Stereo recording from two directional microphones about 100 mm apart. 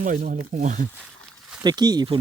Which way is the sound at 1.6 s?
45° right (ahead or behind).